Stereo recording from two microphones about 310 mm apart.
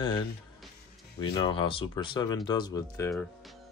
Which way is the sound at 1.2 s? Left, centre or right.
Centre.